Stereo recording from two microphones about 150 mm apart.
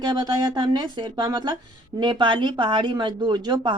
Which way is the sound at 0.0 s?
25° right (ahead or behind).